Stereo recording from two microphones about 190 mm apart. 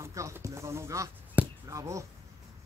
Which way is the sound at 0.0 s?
15° right (ahead or behind).